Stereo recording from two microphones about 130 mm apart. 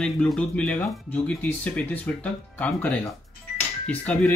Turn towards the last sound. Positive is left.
turn(degrees=10)  # may be behind; listen again after turning